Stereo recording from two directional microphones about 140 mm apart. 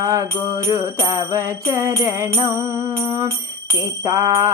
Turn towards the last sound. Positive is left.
turn(degrees=-20)  # may be behind; listen again after turning